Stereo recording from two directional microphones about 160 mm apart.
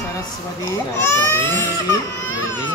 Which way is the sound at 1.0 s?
15° left (ahead or behind).